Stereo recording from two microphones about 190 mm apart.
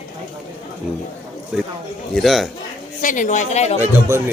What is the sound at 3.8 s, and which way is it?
Speech, 15° right (ahead or behind).